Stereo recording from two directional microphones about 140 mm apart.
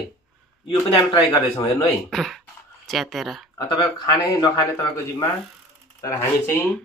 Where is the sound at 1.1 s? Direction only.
25° left (ahead or behind).